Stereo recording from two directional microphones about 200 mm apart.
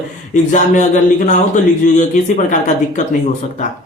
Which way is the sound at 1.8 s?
40° left (ahead or behind).